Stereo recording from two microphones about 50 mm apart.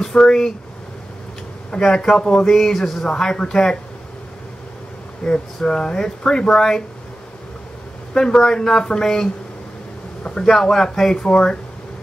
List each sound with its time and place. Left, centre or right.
0.0 s speech: centre
1.8 s speech: centre
5.2 s speech: centre
8.1 s speech: centre
11.2 s speech: left